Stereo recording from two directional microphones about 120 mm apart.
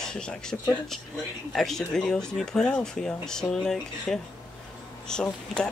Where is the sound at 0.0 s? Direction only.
5° left (ahead or behind).